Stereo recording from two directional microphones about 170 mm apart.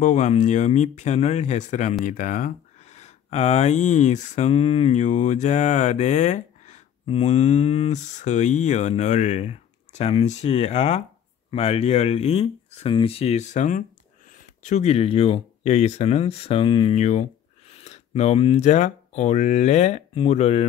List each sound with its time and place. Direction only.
0.0 s speech: 45° left (ahead or behind)
16.9 s speech: 45° left (ahead or behind)